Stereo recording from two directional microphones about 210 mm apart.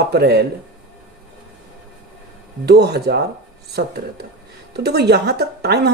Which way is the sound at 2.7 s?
50° right (ahead or behind).